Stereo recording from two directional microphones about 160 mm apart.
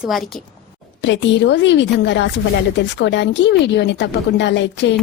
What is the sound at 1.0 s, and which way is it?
A woman's voice, 90° left.